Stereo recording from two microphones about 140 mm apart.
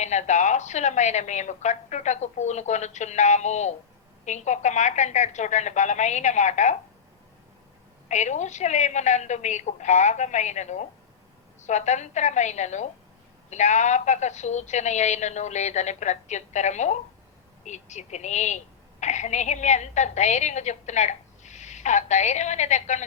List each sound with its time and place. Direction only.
0.0 s a woman's voice: 55° left (ahead or behind)
8.0 s a woman's voice: 55° left (ahead or behind)